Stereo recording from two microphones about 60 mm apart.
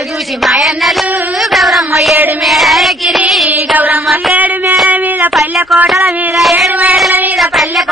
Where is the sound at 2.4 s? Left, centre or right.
Centre.